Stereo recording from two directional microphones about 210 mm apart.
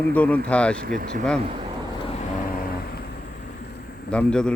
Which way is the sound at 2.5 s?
45° left (ahead or behind).